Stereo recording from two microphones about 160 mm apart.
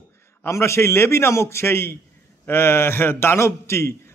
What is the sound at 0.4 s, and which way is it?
A man's voice, 15° left (ahead or behind).